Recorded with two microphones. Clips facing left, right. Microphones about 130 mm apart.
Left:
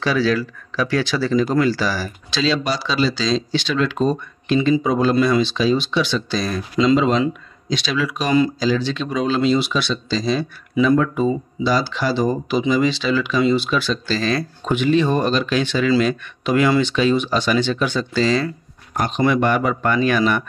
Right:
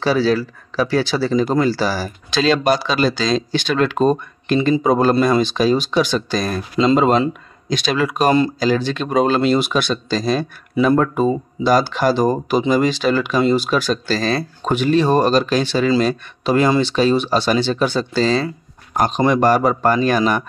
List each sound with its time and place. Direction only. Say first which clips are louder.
0.0 s speech: right 2 dB; 30° right (ahead or behind)
2.3 s speech: right 5 dB; 55° right (ahead or behind); by 20.4 s 40° right (ahead or behind)